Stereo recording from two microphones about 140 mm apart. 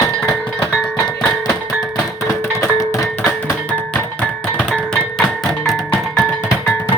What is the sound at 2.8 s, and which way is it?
Music, 20° left (ahead or behind).